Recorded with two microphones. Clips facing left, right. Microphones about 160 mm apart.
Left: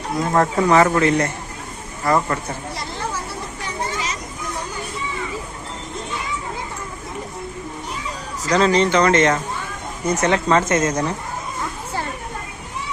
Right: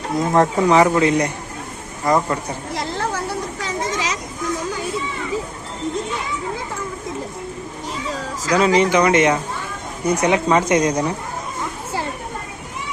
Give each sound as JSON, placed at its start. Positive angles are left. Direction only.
{"t": 0.2, "sound": "speech", "side_deg": -20}
{"t": 3.6, "sound": "children playing", "side_deg": -90}
{"t": 8.4, "sound": "speech", "side_deg": -10}